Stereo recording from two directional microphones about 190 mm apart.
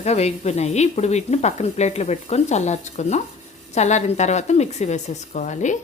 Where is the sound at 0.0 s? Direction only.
35° left (ahead or behind).